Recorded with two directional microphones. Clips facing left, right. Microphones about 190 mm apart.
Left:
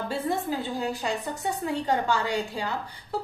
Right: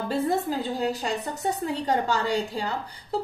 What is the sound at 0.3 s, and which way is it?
A woman's voice, 40° right (ahead or behind).